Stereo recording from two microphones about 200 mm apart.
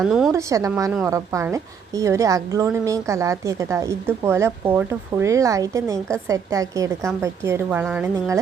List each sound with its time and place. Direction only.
0.0 s a woman's voice: centre (ahead or behind)
0.3 s a woman's voice: 15° right (ahead or behind)